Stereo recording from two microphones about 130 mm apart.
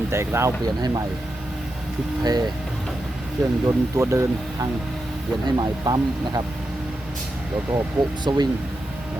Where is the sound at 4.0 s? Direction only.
20° right (ahead or behind).